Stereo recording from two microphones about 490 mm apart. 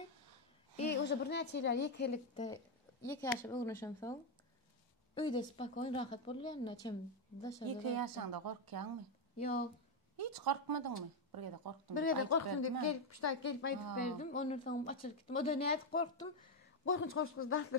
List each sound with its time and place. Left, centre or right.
0.7 s a woman's voice: left
3.1 s a woman's voice: centre
7.6 s a woman's voice: right
9.4 s a woman's voice: centre
10.1 s a woman's voice: right
11.9 s a woman's voice: left
13.9 s a woman's voice: centre
16.8 s speech: left